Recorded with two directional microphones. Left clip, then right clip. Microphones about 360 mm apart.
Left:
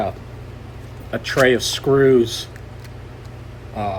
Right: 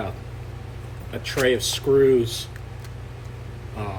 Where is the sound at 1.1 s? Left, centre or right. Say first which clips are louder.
Left 6 dB; centre.